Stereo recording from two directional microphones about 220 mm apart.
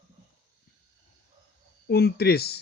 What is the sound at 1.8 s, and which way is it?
Speech, 45° left (ahead or behind).